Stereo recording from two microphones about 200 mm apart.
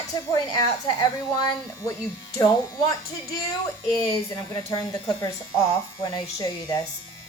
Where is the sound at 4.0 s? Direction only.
20° left (ahead or behind).